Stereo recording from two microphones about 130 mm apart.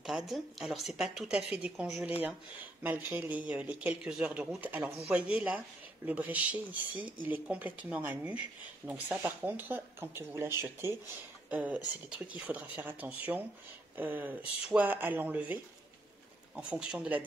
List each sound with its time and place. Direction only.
0.0 s a woman's voice: centre (ahead or behind)